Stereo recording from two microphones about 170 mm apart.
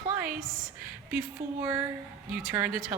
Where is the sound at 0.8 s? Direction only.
10° right (ahead or behind).